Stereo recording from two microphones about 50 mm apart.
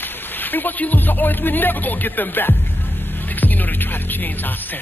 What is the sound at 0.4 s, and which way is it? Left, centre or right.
Music, left.